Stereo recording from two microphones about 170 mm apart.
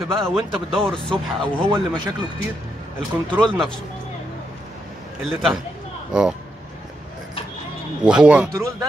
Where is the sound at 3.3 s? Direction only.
5° left (ahead or behind).